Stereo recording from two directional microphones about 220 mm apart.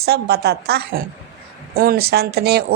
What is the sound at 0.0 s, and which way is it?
A woman's voice, 45° right (ahead or behind).